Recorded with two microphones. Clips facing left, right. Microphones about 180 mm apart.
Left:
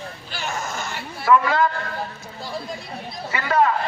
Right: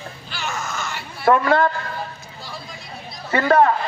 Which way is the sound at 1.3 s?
55° right (ahead or behind).